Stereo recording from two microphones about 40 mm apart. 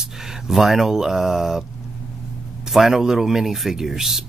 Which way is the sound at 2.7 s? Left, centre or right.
Centre.